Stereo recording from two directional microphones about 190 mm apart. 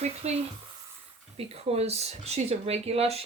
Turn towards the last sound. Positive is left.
turn(degrees=-30)  # may be behind; listen again after turning